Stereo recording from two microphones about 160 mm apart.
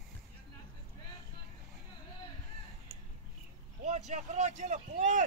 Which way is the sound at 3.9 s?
45° right (ahead or behind).